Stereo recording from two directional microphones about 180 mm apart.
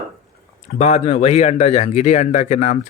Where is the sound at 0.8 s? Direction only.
35° left (ahead or behind).